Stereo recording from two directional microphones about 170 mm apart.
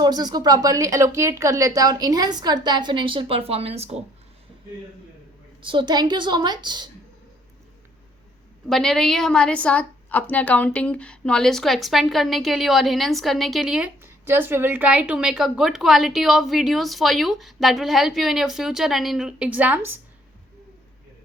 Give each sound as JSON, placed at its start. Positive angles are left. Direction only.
{"t": 0.0, "sound": "speech", "side_deg": -25}
{"t": 5.6, "sound": "speech", "side_deg": -25}
{"t": 8.7, "sound": "a woman's voice", "side_deg": 5}